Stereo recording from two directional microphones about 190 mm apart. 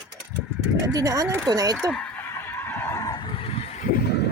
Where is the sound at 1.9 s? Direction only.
5° left (ahead or behind); by 3.8 s 30° left (ahead or behind).